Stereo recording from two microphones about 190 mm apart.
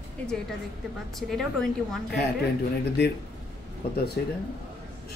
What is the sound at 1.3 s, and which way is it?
Speech, centre (ahead or behind).